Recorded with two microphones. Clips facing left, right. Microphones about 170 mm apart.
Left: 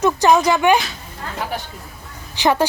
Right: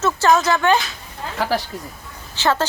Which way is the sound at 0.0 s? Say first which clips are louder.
Left 2 dB; 15° left (ahead or behind).